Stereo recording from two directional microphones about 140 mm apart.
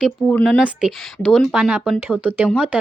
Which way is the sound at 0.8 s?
5° right (ahead or behind).